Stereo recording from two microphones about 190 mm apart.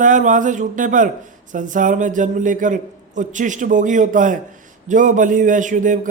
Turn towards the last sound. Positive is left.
turn(degrees=-40)  # may be behind; listen again after turning